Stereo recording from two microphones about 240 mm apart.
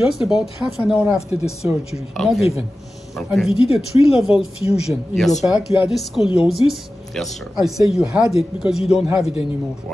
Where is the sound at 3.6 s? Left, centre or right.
Left.